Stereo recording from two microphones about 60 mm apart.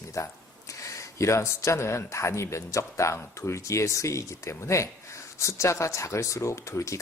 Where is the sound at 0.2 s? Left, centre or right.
Left.